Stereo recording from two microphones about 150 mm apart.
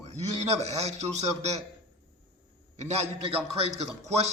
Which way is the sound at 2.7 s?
45° right (ahead or behind).